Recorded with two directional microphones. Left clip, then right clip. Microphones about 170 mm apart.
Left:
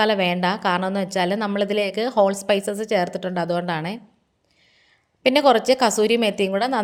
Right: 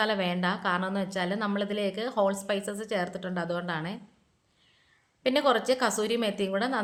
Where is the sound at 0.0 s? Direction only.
35° left (ahead or behind).